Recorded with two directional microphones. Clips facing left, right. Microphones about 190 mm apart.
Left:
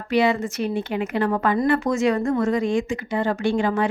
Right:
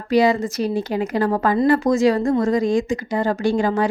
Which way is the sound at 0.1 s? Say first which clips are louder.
Right 3 dB; 40° right (ahead or behind).